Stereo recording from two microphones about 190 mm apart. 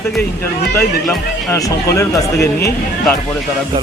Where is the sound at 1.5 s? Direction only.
15° left (ahead or behind).